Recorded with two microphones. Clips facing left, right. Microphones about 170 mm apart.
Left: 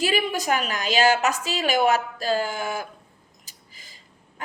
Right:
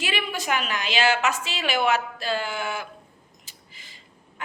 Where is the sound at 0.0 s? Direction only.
40° left (ahead or behind).